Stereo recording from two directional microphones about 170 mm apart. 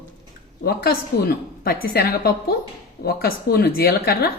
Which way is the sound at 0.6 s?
65° left (ahead or behind).